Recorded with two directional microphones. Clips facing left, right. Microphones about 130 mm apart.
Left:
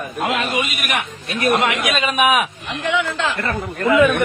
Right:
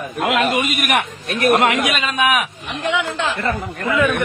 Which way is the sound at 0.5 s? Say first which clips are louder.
Right 4 dB; 50° right (ahead or behind).